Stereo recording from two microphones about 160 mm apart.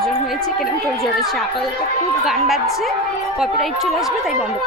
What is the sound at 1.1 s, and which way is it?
Speech, centre (ahead or behind).